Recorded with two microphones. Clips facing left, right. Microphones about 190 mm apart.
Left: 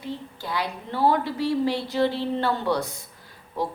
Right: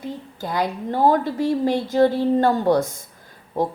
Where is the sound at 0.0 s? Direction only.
45° right (ahead or behind).